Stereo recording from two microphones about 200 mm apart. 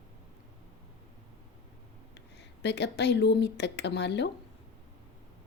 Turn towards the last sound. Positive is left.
turn(degrees=60)  # may be behind; listen again after turning